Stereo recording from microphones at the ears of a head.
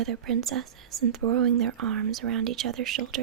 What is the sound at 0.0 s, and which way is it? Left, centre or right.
Speech, right.